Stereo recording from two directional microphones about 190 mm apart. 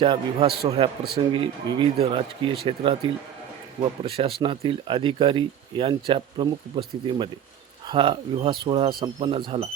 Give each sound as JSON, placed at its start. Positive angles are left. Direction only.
{"t": 0.0, "sound": "speech", "side_deg": -30}